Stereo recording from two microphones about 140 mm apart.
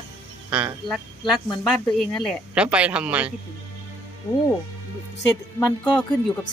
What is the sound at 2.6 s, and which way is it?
Speech, 10° right (ahead or behind).